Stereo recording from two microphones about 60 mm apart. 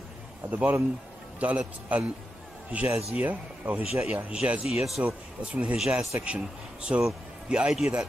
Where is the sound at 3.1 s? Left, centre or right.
Right.